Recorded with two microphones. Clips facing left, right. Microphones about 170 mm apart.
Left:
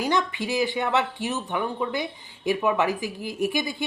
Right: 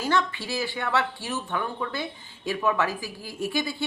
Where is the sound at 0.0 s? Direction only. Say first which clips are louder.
Left 1 dB; 15° left (ahead or behind).